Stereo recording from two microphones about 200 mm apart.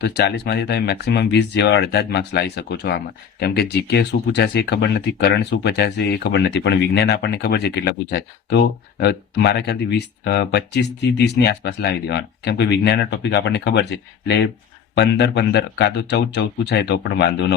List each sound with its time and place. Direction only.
0.0 s speech: 55° left (ahead or behind)